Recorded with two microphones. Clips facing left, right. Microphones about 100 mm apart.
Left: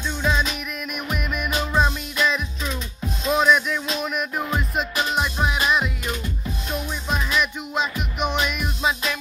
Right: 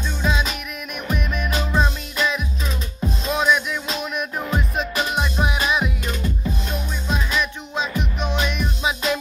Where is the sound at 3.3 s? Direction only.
Centre (ahead or behind).